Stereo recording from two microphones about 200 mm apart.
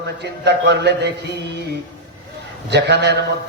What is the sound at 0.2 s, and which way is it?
Speech, 55° right (ahead or behind).